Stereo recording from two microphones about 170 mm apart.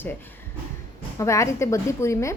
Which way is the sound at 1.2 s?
15° left (ahead or behind).